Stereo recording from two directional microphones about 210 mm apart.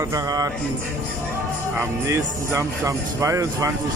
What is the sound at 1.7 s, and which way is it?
Speech, 15° right (ahead or behind).